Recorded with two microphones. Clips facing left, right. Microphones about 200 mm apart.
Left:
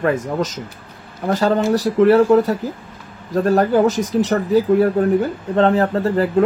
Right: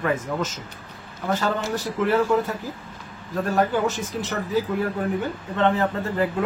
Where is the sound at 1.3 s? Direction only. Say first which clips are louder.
Left 8 dB; 40° left (ahead or behind).